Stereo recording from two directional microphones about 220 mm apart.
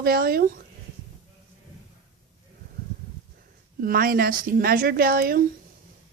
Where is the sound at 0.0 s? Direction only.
45° right (ahead or behind).